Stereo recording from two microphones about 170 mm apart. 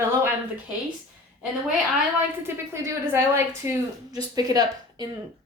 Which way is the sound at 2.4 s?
15° right (ahead or behind).